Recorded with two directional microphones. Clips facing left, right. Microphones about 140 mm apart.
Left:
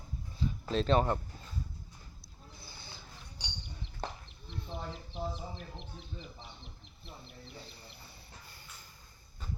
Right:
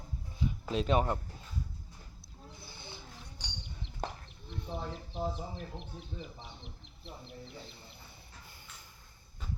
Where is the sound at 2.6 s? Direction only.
25° right (ahead or behind).